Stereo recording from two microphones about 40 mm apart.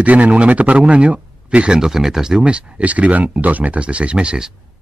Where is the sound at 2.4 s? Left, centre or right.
Right.